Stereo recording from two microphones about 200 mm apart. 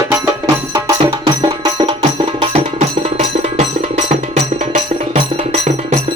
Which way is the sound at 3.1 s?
35° right (ahead or behind).